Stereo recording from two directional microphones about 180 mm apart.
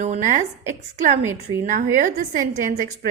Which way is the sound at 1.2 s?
15° right (ahead or behind).